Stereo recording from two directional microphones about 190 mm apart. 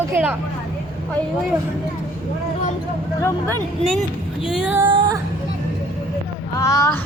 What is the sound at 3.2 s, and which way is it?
Speech, 15° left (ahead or behind).